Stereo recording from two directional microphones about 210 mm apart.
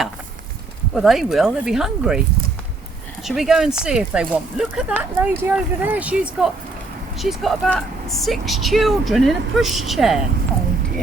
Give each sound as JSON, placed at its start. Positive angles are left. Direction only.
{"t": 0.9, "sound": "speech", "side_deg": 0}
{"t": 3.2, "sound": "speech", "side_deg": 0}